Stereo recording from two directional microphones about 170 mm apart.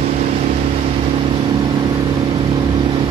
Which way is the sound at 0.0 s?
45° right (ahead or behind).